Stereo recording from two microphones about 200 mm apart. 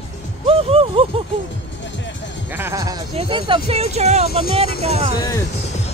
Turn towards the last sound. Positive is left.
turn(degrees=15)  # may be behind; listen again after turning